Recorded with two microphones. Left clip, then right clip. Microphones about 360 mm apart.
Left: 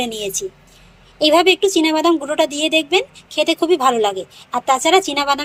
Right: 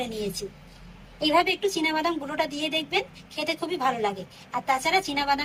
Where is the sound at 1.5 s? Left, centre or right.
Centre.